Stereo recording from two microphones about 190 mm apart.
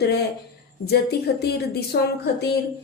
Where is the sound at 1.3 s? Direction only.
55° left (ahead or behind).